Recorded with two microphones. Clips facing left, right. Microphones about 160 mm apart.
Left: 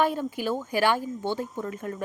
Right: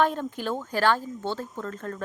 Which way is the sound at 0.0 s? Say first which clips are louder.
Even; 10° left (ahead or behind).